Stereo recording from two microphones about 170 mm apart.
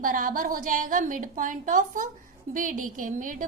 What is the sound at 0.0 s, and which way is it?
A woman's voice, 55° right (ahead or behind).